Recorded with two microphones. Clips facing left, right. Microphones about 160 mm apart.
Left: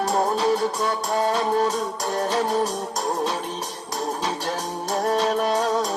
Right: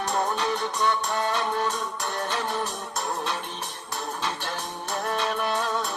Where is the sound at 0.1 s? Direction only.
30° left (ahead or behind).